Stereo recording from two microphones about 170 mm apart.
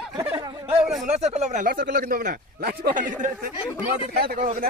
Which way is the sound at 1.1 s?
40° right (ahead or behind).